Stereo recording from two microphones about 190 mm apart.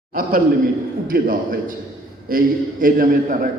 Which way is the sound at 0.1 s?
50° right (ahead or behind).